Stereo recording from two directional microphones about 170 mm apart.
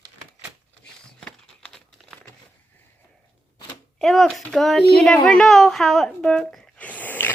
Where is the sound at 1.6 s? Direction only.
5° left (ahead or behind).